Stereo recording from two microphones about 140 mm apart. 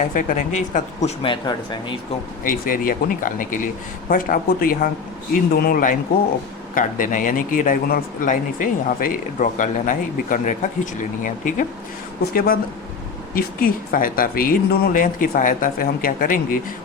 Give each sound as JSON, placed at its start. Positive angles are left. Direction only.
{"t": 0.1, "sound": "speech", "side_deg": 75}
{"t": 1.2, "sound": "speech", "side_deg": 35}
{"t": 2.4, "sound": "speech", "side_deg": 80}
{"t": 4.1, "sound": "speech", "side_deg": 90}
{"t": 12.3, "sound": "speech", "side_deg": 90}